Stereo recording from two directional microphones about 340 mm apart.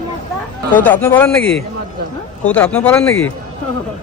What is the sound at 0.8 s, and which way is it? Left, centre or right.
Speech, centre.